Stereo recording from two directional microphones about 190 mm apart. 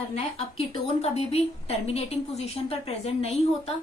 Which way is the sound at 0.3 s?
30° left (ahead or behind).